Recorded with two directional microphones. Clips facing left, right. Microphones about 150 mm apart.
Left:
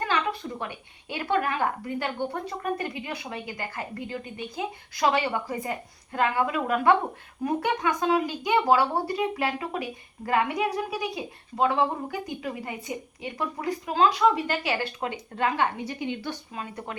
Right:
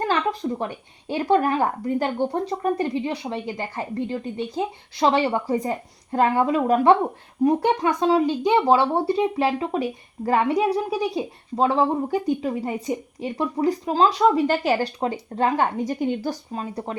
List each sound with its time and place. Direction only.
0.0 s speech: 35° right (ahead or behind)